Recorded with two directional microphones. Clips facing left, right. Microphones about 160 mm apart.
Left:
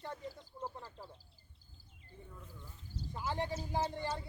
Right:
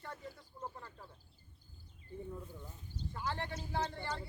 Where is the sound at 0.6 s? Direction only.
20° left (ahead or behind).